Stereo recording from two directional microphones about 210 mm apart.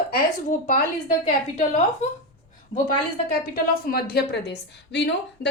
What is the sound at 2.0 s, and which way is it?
Speech, 30° left (ahead or behind).